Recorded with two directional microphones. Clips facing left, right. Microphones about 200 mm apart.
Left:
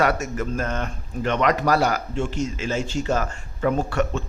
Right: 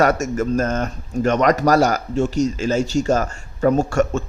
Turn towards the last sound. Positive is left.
turn(degrees=-45)  # may be behind; listen again after turning